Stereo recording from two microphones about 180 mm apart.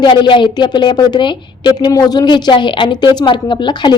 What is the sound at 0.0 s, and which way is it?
A woman's voice, 25° left (ahead or behind).